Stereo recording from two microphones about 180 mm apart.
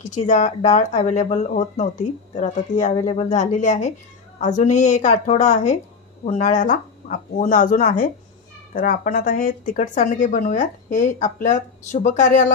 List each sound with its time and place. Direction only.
0.0 s speech: 40° left (ahead or behind)